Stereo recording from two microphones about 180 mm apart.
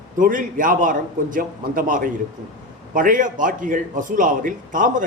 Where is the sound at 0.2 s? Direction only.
50° right (ahead or behind).